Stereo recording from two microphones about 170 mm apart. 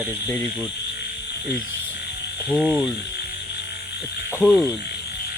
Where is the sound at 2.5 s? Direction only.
5° left (ahead or behind).